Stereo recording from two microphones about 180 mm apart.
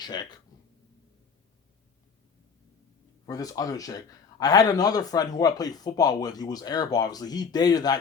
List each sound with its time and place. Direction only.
0.0 s a man's voice: 25° left (ahead or behind)
3.2 s a man's voice: 20° left (ahead or behind)